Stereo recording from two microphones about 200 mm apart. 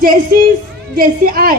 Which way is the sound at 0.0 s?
45° right (ahead or behind).